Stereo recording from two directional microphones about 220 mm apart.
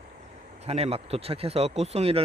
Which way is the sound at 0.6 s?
30° right (ahead or behind).